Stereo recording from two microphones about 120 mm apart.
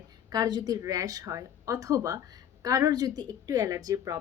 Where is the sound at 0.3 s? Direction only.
35° right (ahead or behind).